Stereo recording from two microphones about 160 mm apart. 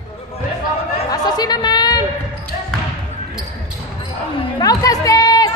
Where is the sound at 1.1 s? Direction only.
25° left (ahead or behind).